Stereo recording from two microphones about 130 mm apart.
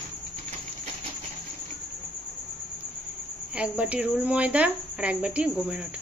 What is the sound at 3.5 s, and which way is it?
Speech, 10° right (ahead or behind).